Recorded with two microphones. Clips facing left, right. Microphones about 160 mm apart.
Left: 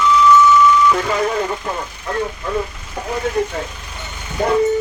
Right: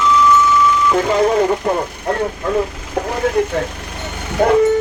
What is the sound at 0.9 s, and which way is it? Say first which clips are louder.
Speech: right 4 dB; 30° right (ahead or behind).